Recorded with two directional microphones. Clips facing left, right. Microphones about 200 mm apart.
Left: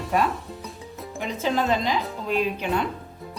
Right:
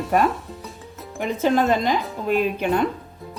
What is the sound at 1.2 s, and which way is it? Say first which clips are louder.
A woman's voice: right 5 dB; 50° right (ahead or behind).